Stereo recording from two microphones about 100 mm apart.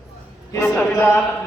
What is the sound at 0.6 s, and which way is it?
Speech, 5° left (ahead or behind).